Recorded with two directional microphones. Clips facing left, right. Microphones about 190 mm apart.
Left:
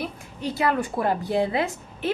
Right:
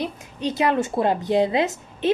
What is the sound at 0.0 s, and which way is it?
A woman's voice, 20° right (ahead or behind).